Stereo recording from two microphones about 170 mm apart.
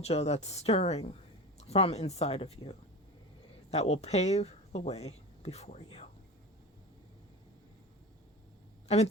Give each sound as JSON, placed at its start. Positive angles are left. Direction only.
{"t": 0.0, "sound": "speech", "side_deg": 40}